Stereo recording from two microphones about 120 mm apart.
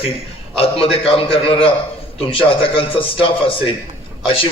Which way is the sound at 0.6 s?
55° left (ahead or behind).